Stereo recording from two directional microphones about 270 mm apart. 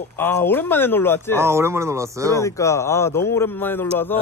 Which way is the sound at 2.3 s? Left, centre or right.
Centre.